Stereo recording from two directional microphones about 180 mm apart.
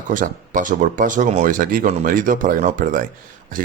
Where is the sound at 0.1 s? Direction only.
45° right (ahead or behind).